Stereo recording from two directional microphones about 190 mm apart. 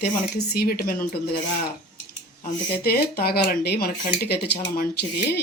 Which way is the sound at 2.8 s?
55° left (ahead or behind).